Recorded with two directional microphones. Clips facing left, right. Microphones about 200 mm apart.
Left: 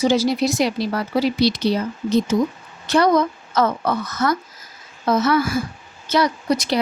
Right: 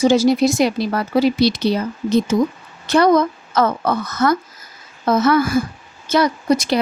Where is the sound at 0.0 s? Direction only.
50° right (ahead or behind).